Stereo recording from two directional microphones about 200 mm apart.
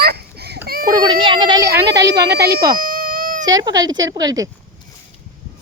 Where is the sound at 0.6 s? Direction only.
50° right (ahead or behind).